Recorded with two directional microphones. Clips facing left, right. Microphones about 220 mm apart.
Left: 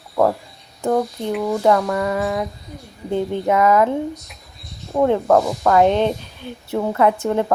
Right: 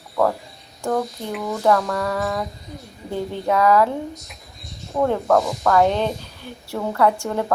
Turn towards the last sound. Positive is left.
turn(degrees=20)  # may be behind; listen again after turning